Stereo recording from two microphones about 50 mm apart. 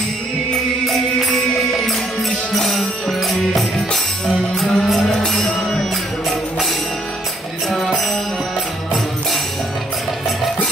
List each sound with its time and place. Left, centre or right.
0.8 s music: centre
7.7 s music: centre